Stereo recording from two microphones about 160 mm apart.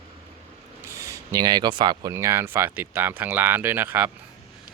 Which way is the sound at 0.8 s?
20° right (ahead or behind).